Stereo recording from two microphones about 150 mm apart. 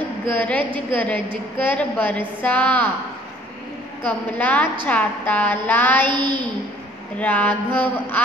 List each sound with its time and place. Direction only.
0.3 s a woman's voice: 10° left (ahead or behind)
4.0 s a woman's voice: 10° left (ahead or behind)
6.1 s a woman's voice: 30° right (ahead or behind)
7.2 s a woman's voice: 10° left (ahead or behind)